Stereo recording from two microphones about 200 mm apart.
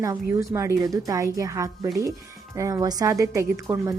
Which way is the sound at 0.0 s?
15° right (ahead or behind).